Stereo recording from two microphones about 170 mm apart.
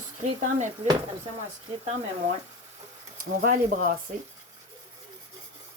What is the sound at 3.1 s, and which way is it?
Speech, 55° right (ahead or behind).